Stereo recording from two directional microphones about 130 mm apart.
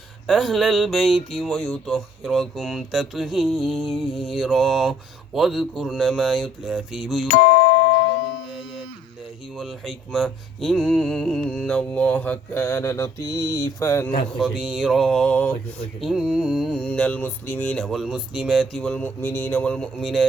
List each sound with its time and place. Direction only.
0.3 s speech: centre (ahead or behind)
9.6 s speech: centre (ahead or behind); by 14.1 s 20° left (ahead or behind)
14.5 s speech: 5° right (ahead or behind); by 15.5 s 10° left (ahead or behind)
16.0 s speech: 5° right (ahead or behind)